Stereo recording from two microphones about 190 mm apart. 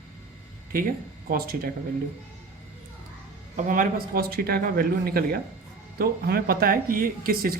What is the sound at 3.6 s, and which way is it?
Speech, 45° right (ahead or behind).